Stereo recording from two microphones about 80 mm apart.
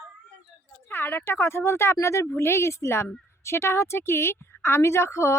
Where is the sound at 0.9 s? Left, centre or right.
Left.